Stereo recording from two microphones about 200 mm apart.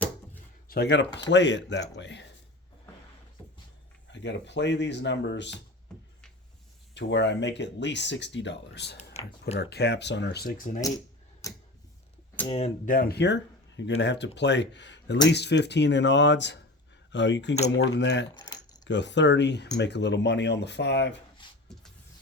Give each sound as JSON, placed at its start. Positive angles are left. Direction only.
{"t": 0.7, "sound": "speech", "side_deg": 55}
{"t": 4.1, "sound": "speech", "side_deg": 60}
{"t": 5.9, "sound": "a sound", "side_deg": 5}
{"t": 6.9, "sound": "speech", "side_deg": 60}
{"t": 11.4, "sound": "tick-tock", "side_deg": 15}
{"t": 12.5, "sound": "speech", "side_deg": 30}
{"t": 21.4, "sound": "a sound", "side_deg": 25}